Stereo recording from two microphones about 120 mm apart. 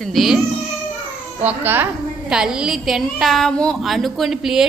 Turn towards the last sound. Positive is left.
turn(degrees=-5)  # may be behind; listen again after turning